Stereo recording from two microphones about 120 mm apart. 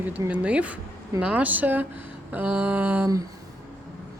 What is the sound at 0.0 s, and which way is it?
Speech, 15° right (ahead or behind).